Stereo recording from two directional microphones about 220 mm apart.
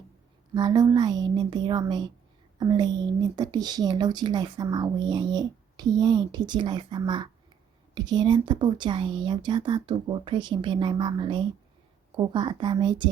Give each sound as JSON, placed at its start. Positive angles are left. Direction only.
{"t": 0.5, "sound": "speech", "side_deg": -20}